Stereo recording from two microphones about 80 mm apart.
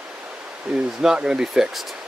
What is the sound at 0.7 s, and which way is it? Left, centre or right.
Speech, centre.